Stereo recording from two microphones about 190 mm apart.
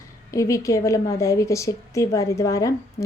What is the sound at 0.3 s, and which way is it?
A woman's voice, 15° left (ahead or behind).